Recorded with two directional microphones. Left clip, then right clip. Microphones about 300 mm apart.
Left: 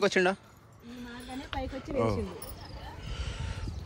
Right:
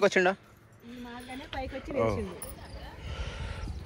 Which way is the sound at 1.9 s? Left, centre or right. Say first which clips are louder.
Right 1 dB; centre.